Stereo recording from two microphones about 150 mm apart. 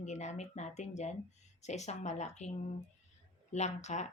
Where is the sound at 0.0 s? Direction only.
50° left (ahead or behind).